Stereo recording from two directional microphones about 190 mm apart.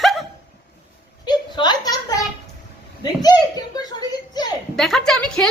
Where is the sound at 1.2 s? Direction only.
20° left (ahead or behind).